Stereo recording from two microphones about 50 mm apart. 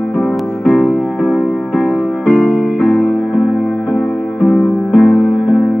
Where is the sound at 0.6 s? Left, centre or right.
Left.